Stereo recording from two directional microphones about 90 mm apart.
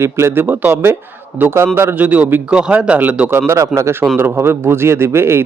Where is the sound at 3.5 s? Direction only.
35° right (ahead or behind).